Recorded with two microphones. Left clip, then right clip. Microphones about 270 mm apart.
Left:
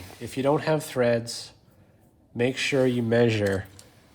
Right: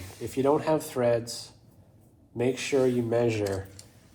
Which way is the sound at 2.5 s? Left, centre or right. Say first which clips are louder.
Even; left.